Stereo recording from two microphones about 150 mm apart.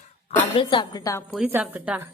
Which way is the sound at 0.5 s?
35° left (ahead or behind).